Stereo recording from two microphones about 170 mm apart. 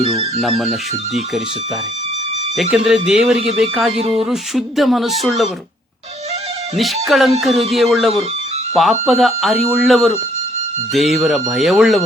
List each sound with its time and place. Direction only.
0.6 s speech: centre (ahead or behind)
2.6 s speech: 5° right (ahead or behind)
3.9 s speech: 35° right (ahead or behind)
4.3 s speech: centre (ahead or behind)
6.7 s speech: centre (ahead or behind)